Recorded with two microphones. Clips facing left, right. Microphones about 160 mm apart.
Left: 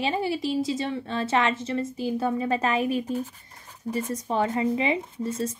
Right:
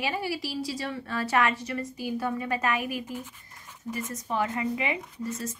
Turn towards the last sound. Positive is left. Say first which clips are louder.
# left 5 dB
turn(degrees=30)  # may be behind; listen again after turning